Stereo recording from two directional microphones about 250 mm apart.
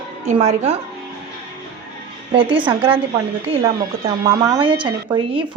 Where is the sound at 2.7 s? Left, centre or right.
Right.